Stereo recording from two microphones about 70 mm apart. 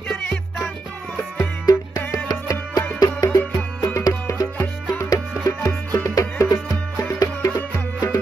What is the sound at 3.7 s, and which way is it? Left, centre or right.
Music, left.